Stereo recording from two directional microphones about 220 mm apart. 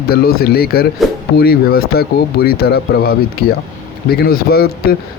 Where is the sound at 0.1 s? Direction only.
45° left (ahead or behind).